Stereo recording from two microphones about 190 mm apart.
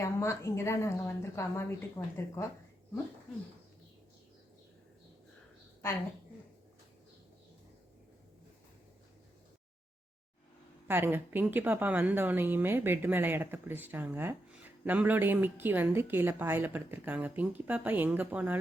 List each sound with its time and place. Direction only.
0.0 s a woman's voice: 15° left (ahead or behind)
10.8 s speech: 10° right (ahead or behind)